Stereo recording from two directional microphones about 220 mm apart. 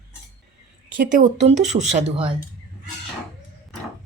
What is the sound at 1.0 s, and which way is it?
A woman's voice, 35° right (ahead or behind).